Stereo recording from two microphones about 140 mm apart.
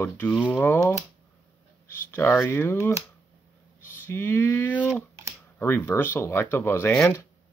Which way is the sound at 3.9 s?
15° left (ahead or behind).